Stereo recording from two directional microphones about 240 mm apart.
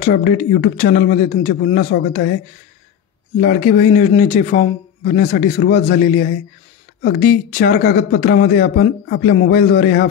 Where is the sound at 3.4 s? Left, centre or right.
Left.